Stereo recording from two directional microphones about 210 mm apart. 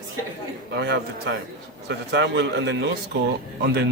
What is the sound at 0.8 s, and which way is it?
A man's voice, 55° right (ahead or behind).